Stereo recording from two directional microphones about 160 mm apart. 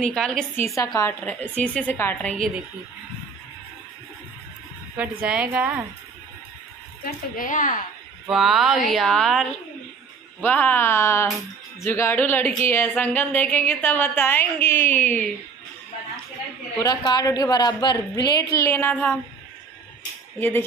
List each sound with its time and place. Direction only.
0.0 s speech: 5° left (ahead or behind)
0.7 s a woman's voice: 20° left (ahead or behind)
1.2 s a woman's voice: 10° left (ahead or behind)
4.9 s a woman's voice: 10° right (ahead or behind)
7.1 s speech: 60° left (ahead or behind)
8.3 s a woman's voice: centre (ahead or behind)
16.7 s a woman's voice: 25° left (ahead or behind)
20.3 s a woman's voice: 10° left (ahead or behind)